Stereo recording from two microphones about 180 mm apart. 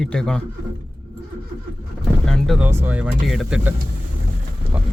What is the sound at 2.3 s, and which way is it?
Speech, centre (ahead or behind).